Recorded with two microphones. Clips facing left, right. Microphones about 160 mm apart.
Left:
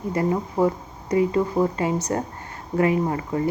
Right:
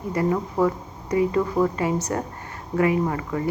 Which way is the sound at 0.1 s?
25° left (ahead or behind).